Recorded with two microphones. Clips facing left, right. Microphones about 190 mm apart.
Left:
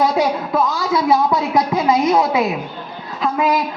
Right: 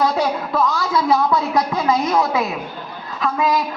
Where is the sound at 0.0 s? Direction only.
20° left (ahead or behind).